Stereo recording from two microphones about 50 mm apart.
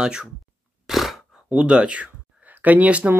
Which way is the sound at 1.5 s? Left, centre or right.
Centre.